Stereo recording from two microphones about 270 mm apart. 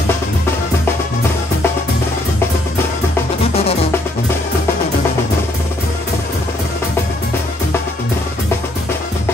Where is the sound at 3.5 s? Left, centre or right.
Left.